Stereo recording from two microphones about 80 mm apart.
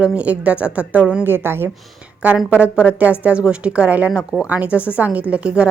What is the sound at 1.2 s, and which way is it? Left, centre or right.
Speech, right.